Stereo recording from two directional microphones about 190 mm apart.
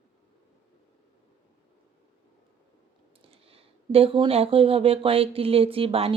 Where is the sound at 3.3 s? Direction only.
30° right (ahead or behind).